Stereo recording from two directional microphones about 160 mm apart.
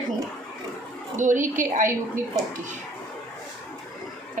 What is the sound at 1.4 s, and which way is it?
Speech, 55° right (ahead or behind).